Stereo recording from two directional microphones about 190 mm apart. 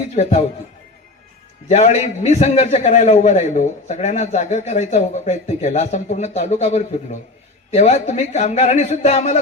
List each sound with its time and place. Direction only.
0.2 s a man's voice: 35° left (ahead or behind)
1.6 s a man's voice: 35° left (ahead or behind)